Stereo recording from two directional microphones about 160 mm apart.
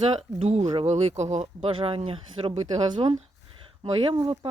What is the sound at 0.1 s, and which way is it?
Speech, 40° right (ahead or behind).